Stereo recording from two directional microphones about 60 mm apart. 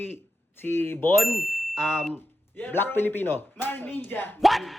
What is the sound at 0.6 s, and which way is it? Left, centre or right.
Speech, left.